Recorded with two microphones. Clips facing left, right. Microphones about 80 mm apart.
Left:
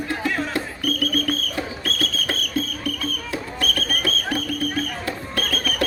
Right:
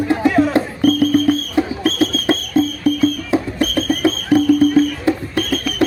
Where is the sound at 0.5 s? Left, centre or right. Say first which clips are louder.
Right 11 dB; right.